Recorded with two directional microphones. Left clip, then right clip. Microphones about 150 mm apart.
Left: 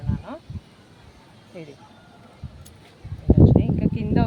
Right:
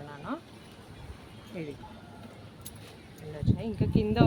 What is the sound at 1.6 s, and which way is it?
Speech, 40° left (ahead or behind).